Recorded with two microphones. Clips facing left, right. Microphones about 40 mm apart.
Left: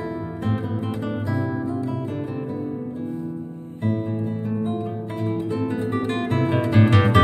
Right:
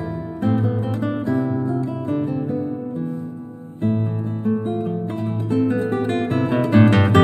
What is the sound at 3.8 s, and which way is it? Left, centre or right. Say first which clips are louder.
Music: right 3 dB; right.